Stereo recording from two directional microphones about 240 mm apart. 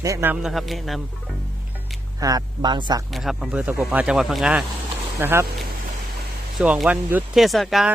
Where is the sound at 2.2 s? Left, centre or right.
Centre.